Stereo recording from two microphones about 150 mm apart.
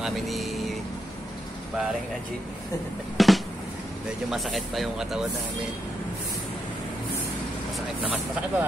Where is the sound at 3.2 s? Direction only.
Centre (ahead or behind).